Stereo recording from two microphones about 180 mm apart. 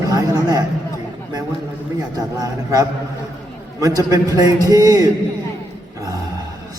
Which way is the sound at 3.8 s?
20° right (ahead or behind).